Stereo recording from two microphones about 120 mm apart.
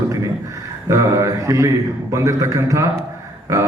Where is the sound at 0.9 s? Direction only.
25° right (ahead or behind).